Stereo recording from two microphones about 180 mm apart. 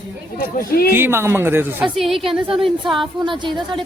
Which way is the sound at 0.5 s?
55° left (ahead or behind).